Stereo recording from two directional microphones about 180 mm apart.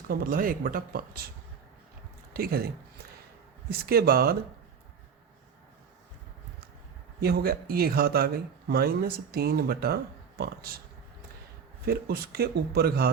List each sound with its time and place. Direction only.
0.1 s speech: 50° right (ahead or behind)
2.3 s speech: 55° right (ahead or behind)
3.7 s speech: 60° right (ahead or behind)
7.2 s speech: 60° right (ahead or behind)
11.9 s speech: 60° right (ahead or behind)